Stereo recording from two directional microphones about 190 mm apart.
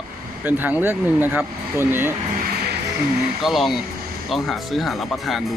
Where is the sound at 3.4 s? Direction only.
Centre (ahead or behind).